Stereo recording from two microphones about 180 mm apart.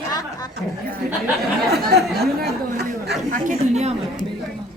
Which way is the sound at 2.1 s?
60° right (ahead or behind).